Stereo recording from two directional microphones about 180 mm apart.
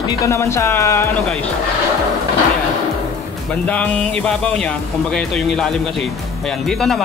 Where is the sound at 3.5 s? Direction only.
10° left (ahead or behind).